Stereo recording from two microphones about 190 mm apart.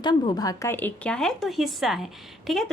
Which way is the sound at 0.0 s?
20° left (ahead or behind).